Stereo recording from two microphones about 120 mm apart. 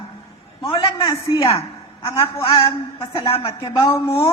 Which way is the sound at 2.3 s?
50° left (ahead or behind).